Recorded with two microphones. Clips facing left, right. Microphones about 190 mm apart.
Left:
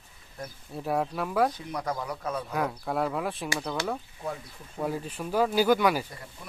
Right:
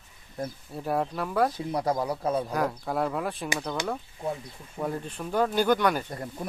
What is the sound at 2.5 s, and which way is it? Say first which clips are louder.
Speech: right 1 dB; centre (ahead or behind).